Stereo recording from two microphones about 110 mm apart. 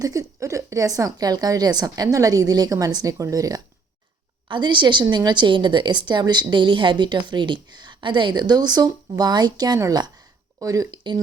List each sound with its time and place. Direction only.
0.0 s a woman's voice: 30° right (ahead or behind)
4.4 s a woman's voice: 45° right (ahead or behind)